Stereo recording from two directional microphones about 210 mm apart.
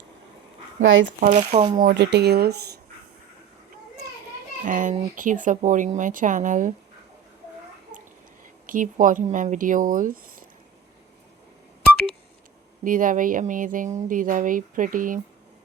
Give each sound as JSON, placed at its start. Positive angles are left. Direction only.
{"t": 0.8, "sound": "speech", "side_deg": -60}
{"t": 1.2, "sound": "speech", "side_deg": -35}
{"t": 4.6, "sound": "speech", "side_deg": -35}
{"t": 8.6, "sound": "speech", "side_deg": -40}
{"t": 12.8, "sound": "speech", "side_deg": -40}